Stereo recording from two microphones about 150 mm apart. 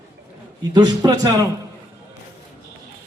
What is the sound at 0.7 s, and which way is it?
Speech, 25° right (ahead or behind).